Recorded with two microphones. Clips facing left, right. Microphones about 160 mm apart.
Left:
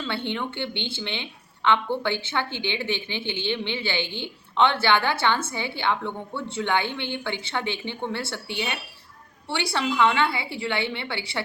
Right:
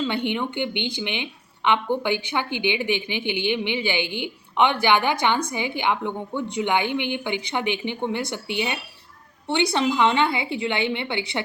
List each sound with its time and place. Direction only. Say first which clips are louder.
0.0 s a woman's voice: right 4 dB; 15° right (ahead or behind)